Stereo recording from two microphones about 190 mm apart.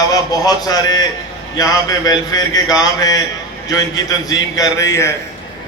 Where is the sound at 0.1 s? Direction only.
20° left (ahead or behind).